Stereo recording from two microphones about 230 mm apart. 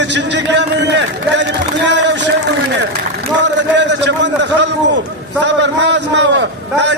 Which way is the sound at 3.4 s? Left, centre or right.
Right.